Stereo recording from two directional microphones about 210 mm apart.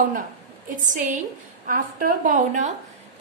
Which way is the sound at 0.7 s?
40° right (ahead or behind).